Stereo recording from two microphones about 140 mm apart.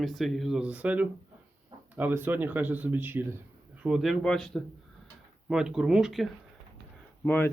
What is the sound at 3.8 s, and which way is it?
Speech, centre (ahead or behind).